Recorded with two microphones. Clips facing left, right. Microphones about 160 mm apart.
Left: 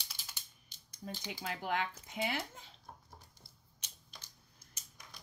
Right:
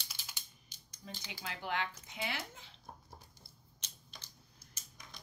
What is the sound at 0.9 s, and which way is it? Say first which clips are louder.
Speech: left 5 dB; 45° left (ahead or behind).